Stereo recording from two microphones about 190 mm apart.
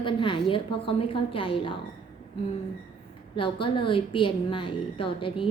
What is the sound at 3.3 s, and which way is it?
A woman's voice, 25° left (ahead or behind).